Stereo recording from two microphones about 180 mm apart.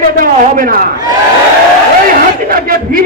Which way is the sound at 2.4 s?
55° right (ahead or behind).